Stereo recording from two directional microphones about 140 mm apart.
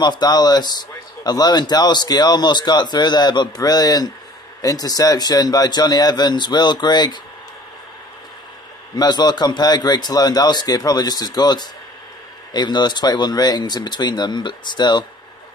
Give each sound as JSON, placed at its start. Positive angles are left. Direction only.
{"t": 0.0, "sound": "speech", "side_deg": 30}
{"t": 8.9, "sound": "speech", "side_deg": 30}